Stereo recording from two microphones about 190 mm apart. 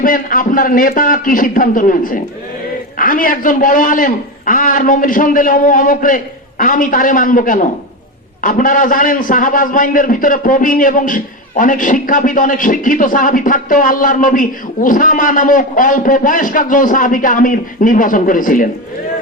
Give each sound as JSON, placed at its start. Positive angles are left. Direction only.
{"t": 0.0, "sound": "a man's voice", "side_deg": 45}